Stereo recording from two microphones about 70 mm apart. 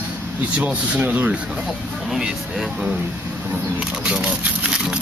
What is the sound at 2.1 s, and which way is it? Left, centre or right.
Speech, centre.